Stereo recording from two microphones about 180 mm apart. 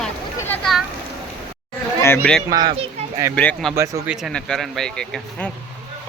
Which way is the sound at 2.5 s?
25° right (ahead or behind).